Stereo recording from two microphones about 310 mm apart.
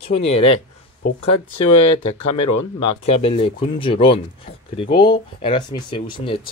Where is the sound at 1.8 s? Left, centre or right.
Left.